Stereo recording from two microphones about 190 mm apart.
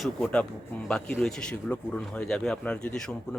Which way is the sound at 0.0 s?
5° left (ahead or behind).